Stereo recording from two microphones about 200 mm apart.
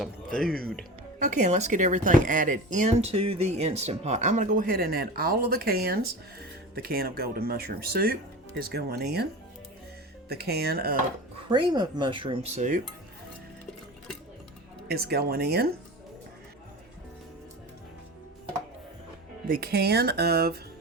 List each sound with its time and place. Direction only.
0.0 s speech: centre (ahead or behind)
1.2 s speech: 35° right (ahead or behind); by 9.2 s 55° right (ahead or behind)
10.2 s speech: 55° right (ahead or behind)
11.4 s speech: 20° right (ahead or behind)
14.8 s speech: 55° right (ahead or behind)
19.5 s speech: 50° right (ahead or behind)